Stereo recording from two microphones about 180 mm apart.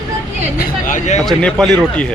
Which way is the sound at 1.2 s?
5° left (ahead or behind).